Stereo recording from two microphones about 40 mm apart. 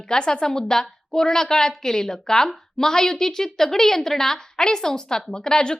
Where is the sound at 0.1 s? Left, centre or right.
Centre.